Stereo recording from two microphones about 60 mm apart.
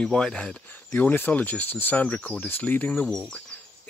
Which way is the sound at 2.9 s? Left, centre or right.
Centre.